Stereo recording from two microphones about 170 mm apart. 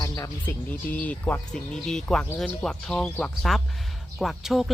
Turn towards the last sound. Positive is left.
turn(degrees=0)  # may be behind; listen again after turning